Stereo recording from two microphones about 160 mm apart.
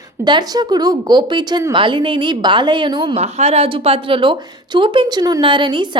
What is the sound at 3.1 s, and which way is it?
A woman's voice, 40° right (ahead or behind).